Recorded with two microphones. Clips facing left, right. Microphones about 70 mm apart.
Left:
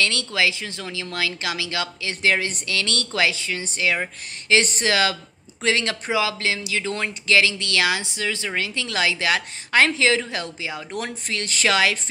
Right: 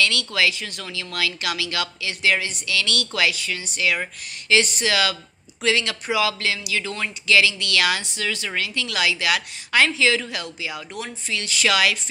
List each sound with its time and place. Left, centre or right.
0.0 s speech: left
4.6 s speech: left
11.0 s speech: left